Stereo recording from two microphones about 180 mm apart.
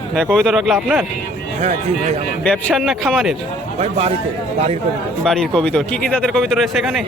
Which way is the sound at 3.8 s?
35° right (ahead or behind).